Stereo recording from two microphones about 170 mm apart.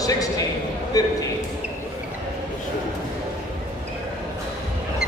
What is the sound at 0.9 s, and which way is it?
Speech, 20° left (ahead or behind).